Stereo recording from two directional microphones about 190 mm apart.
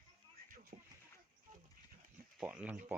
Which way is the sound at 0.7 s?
40° right (ahead or behind).